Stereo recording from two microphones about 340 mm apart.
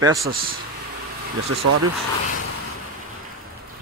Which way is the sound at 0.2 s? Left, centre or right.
Right.